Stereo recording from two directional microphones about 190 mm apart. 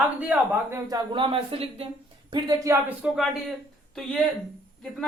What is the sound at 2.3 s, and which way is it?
Speech, 20° right (ahead or behind).